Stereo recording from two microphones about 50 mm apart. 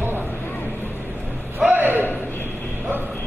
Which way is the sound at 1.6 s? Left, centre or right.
Right.